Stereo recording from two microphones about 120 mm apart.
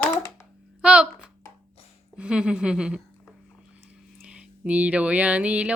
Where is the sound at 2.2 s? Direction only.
10° right (ahead or behind).